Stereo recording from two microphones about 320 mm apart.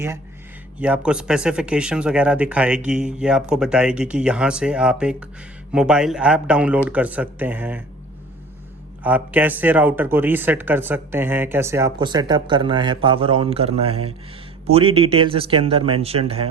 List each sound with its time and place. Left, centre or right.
0.8 s speech: centre
9.0 s speech: centre